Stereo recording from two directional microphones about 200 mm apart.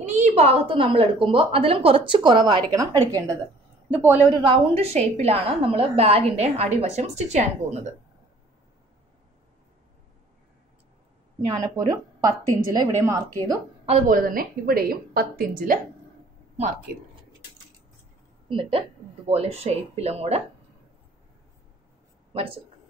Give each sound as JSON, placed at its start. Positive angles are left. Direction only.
{"t": 0.0, "sound": "a woman's voice", "side_deg": -35}
{"t": 4.4, "sound": "a woman's voice", "side_deg": -30}
{"t": 11.4, "sound": "a woman's voice", "side_deg": -20}
{"t": 13.8, "sound": "a woman's voice", "side_deg": -35}
{"t": 16.5, "sound": "speech", "side_deg": -35}
{"t": 18.5, "sound": "a woman's voice", "side_deg": -25}
{"t": 22.3, "sound": "speech", "side_deg": -30}